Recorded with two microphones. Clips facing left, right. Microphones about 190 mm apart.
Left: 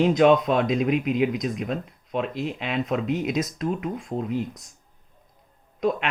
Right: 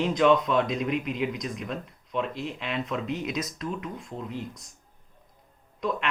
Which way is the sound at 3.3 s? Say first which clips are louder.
Left 6 dB; 45° left (ahead or behind).